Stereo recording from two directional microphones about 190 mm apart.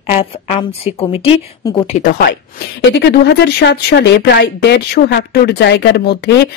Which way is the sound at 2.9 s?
55° left (ahead or behind).